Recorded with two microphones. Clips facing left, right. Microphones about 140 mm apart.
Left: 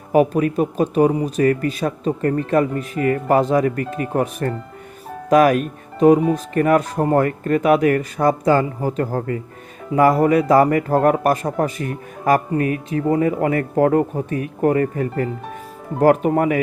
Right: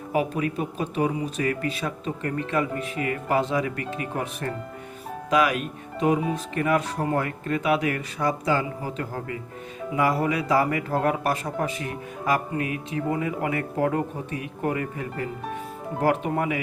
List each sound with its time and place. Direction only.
0.1 s speech: 45° left (ahead or behind)